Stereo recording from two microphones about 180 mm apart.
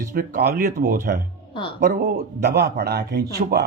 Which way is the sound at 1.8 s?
65° right (ahead or behind).